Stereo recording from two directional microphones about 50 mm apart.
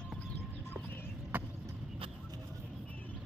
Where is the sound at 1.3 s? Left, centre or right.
Right.